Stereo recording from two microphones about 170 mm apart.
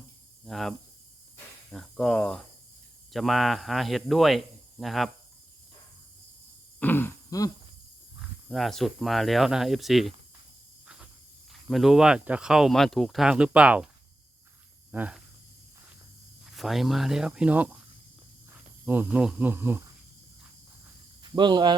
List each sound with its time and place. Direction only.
0.4 s speech: centre (ahead or behind)
6.7 s speech: 10° left (ahead or behind)
8.4 s speech: centre (ahead or behind)
11.7 s speech: centre (ahead or behind)
14.9 s speech: 10° right (ahead or behind)
16.6 s speech: centre (ahead or behind)
18.9 s speech: 10° right (ahead or behind)
21.2 s speech: 25° right (ahead or behind)